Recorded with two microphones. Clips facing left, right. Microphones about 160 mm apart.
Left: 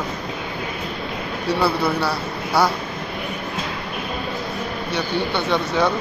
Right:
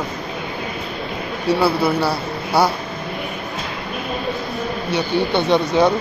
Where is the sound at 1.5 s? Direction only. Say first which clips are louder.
Right 2 dB; 5° right (ahead or behind).